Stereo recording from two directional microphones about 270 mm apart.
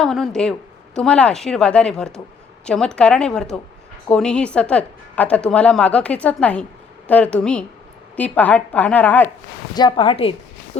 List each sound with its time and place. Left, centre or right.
0.0 s a woman's voice: centre
9.7 s a woman's voice: centre